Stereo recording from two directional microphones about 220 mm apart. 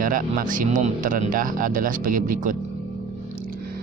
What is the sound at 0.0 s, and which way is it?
Speech, 40° right (ahead or behind).